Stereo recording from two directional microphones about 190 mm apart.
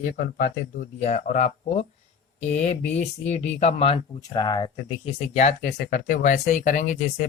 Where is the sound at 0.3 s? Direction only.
45° left (ahead or behind).